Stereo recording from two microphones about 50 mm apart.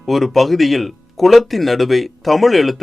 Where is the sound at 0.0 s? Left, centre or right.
Centre.